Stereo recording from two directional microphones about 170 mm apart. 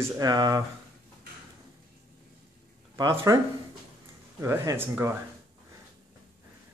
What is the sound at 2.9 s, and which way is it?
Speech, 20° right (ahead or behind).